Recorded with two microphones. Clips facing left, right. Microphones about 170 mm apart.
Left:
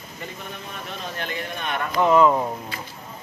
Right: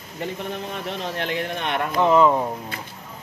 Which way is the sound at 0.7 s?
80° right.